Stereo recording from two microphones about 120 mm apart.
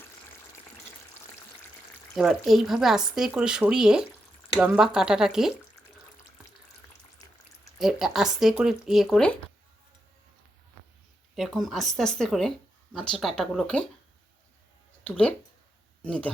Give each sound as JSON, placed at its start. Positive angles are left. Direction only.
{"t": 2.1, "sound": "speech", "side_deg": -5}
{"t": 7.2, "sound": "a sound", "side_deg": 30}
{"t": 7.8, "sound": "speech", "side_deg": -5}
{"t": 11.3, "sound": "speech", "side_deg": 0}
{"t": 15.0, "sound": "speech", "side_deg": 10}